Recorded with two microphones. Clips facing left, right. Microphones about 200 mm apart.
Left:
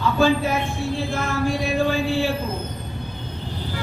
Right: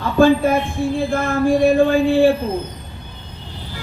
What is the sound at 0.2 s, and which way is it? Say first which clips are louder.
A man's voice: right 8 dB; 55° right (ahead or behind).